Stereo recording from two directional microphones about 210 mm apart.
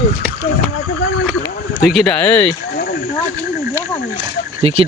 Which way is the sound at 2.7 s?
45° left (ahead or behind).